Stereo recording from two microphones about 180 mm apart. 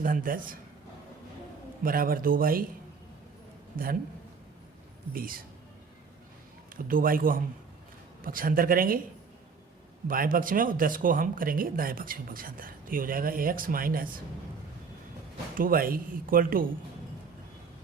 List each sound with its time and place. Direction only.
0.0 s speech: 50° right (ahead or behind)
1.8 s speech: 55° right (ahead or behind)
5.1 s speech: 55° right (ahead or behind)
6.7 s speech: 50° right (ahead or behind)
10.1 s speech: 50° right (ahead or behind)
15.5 s speech: 50° right (ahead or behind)